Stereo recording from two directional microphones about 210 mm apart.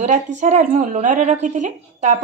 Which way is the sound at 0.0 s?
35° right (ahead or behind).